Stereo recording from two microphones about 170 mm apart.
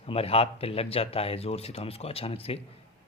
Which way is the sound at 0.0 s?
35° left (ahead or behind).